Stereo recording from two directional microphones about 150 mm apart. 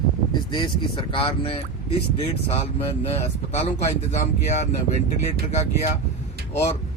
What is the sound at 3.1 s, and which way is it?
Speech, 45° left (ahead or behind).